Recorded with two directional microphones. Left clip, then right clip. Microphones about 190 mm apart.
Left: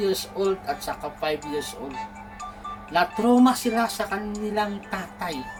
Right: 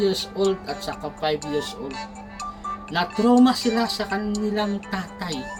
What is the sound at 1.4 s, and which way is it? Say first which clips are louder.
Speech: right 3 dB; 35° right (ahead or behind).